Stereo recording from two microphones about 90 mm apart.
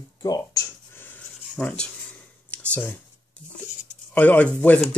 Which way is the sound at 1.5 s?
10° left (ahead or behind).